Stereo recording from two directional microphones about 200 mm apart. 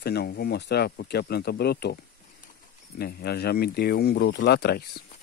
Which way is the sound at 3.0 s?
50° left (ahead or behind).